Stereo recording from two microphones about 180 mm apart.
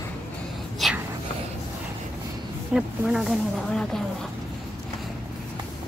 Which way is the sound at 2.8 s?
Centre (ahead or behind).